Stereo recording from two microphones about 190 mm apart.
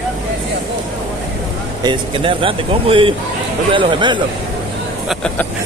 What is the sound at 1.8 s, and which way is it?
Speech, 25° right (ahead or behind).